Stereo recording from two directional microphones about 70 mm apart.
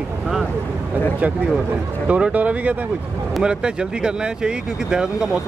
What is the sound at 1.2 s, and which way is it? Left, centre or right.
Speech, right.